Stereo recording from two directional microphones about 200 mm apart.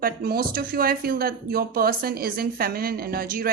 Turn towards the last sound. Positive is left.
turn(degrees=-45)  # may be behind; listen again after turning